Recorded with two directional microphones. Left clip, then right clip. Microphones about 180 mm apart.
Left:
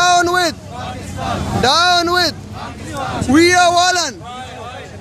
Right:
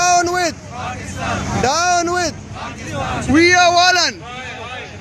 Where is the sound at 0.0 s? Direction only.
Centre (ahead or behind).